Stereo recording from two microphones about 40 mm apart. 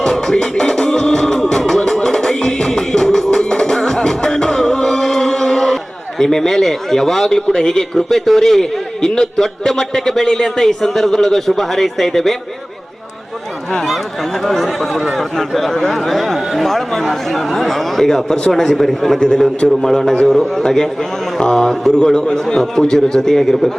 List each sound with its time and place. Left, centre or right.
0.0 s music: centre
9.4 s a man's voice: centre
14.4 s a man's voice: centre
19.2 s speech: centre
21.9 s a man's voice: left